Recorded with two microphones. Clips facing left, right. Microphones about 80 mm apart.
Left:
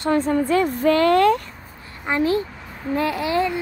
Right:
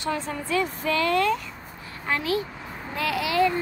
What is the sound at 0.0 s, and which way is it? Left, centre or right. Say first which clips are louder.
Speech: left 9 dB; left.